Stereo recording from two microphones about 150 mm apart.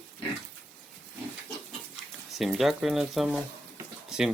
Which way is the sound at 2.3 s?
Centre (ahead or behind).